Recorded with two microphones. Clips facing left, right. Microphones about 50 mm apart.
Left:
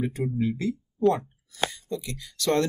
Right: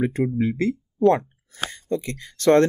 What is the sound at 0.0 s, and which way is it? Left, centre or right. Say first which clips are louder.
Speech: right 5 dB; right.